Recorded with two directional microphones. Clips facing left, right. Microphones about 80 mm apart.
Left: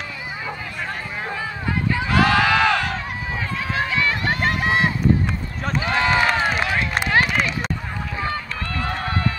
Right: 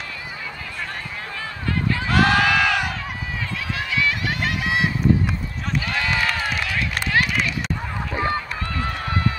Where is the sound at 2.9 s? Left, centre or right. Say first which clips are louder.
Left 3 dB; left.